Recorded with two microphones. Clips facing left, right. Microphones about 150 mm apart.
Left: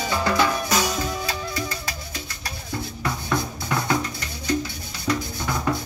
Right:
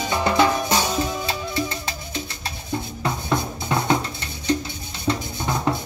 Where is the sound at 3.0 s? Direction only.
25° right (ahead or behind).